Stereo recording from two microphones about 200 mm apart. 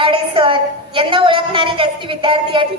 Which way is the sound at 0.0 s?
25° right (ahead or behind).